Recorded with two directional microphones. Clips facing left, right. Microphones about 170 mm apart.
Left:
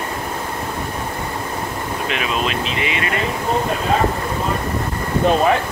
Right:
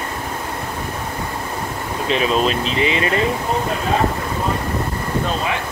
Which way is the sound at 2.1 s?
35° right (ahead or behind).